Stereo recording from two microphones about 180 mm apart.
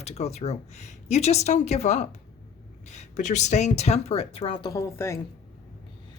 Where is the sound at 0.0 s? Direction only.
35° left (ahead or behind); by 5.2 s 15° left (ahead or behind).